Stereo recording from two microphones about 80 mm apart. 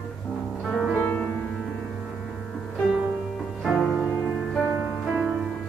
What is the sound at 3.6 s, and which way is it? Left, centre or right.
Music, centre.